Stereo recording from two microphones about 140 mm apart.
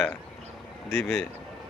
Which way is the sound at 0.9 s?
15° left (ahead or behind).